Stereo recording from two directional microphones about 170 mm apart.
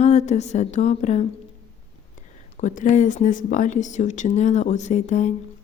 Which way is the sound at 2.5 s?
45° left (ahead or behind).